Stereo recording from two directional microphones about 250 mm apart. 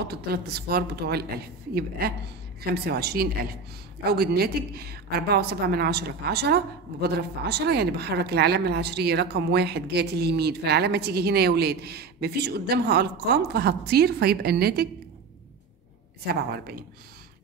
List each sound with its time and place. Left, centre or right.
0.0 s a woman's voice: right